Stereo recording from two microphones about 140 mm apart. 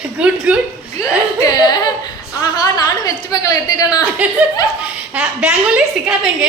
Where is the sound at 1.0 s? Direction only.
25° left (ahead or behind).